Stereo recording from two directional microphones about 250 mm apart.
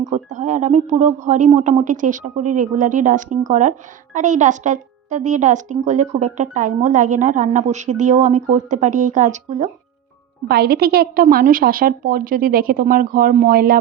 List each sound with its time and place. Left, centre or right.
0.1 s a woman's voice: right
10.5 s a woman's voice: right